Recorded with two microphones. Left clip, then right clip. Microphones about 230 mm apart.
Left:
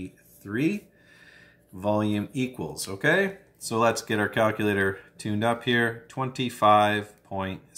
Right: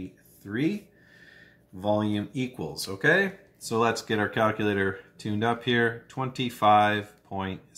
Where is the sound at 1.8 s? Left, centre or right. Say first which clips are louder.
Left 1 dB; centre.